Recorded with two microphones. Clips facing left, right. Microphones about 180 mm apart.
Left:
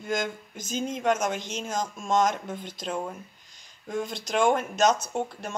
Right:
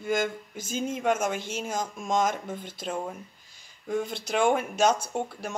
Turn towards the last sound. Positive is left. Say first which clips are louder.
# left 1 dB
turn(degrees=-10)  # may be behind; listen again after turning